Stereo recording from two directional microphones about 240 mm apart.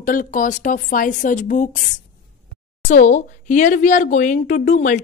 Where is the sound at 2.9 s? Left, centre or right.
Left.